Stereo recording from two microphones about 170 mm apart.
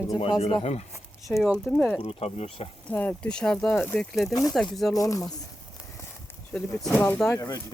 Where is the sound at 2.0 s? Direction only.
35° left (ahead or behind).